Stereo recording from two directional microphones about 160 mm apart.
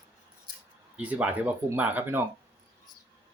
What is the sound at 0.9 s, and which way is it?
Speech, 10° right (ahead or behind).